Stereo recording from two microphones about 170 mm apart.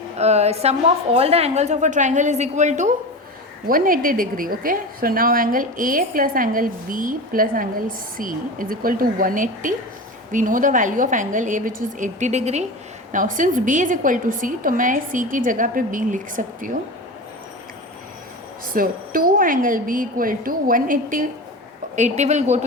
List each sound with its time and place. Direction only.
0.2 s a woman's voice: 40° right (ahead or behind)
3.7 s a woman's voice: 55° right (ahead or behind)
18.7 s a woman's voice: 55° right (ahead or behind)